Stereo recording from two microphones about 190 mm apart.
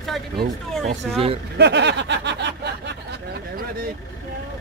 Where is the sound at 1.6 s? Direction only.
65° right (ahead or behind).